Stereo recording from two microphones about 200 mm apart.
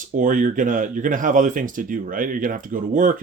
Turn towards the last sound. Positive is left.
turn(degrees=-40)  # may be behind; listen again after turning